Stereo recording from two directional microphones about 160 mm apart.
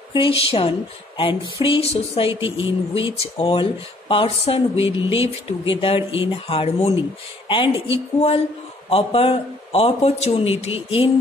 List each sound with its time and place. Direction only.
0.1 s speech: 35° left (ahead or behind)